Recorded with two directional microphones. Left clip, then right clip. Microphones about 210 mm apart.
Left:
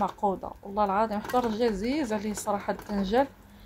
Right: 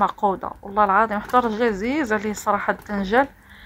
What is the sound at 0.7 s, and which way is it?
Speech, 5° right (ahead or behind).